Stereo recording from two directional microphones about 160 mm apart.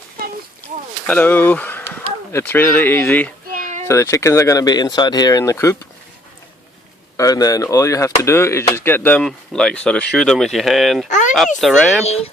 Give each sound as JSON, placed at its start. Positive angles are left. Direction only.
{"t": 1.0, "sound": "speech", "side_deg": 10}
{"t": 3.5, "sound": "a sound", "side_deg": -55}
{"t": 3.8, "sound": "speech", "side_deg": 15}
{"t": 7.2, "sound": "speech", "side_deg": 20}
{"t": 11.1, "sound": "speech", "side_deg": 50}
{"t": 11.6, "sound": "speech", "side_deg": 0}
{"t": 12.0, "sound": "speech", "side_deg": 40}